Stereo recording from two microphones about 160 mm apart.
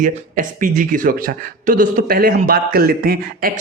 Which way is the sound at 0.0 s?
55° right (ahead or behind).